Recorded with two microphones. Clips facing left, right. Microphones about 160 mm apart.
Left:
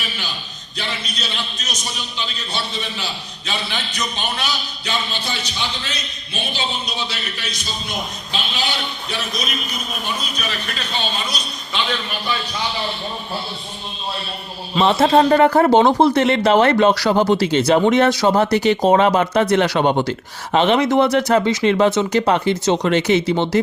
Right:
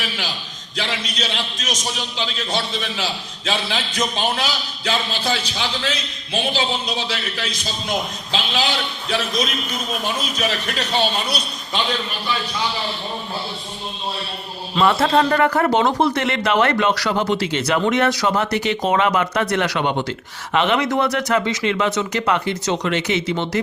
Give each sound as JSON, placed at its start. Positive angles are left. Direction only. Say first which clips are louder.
{"t": 0.8, "sound": "a man's voice", "louder": "right 3 dB", "side_deg": -90}
{"t": 10.8, "sound": "speech", "louder": "right 6 dB", "side_deg": -80}
{"t": 14.8, "sound": "speech", "louder": "left 3 dB", "side_deg": 20}